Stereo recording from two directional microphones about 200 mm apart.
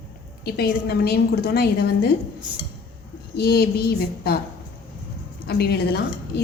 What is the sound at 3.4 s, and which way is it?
A woman's voice, 50° left (ahead or behind).